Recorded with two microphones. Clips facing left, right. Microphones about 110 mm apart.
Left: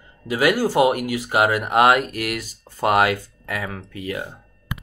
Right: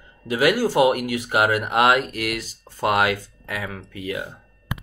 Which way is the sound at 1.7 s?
45° left (ahead or behind).